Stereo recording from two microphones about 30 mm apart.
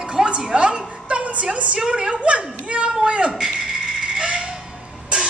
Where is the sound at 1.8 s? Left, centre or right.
Right.